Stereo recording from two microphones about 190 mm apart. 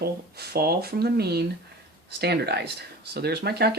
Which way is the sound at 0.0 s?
55° right (ahead or behind).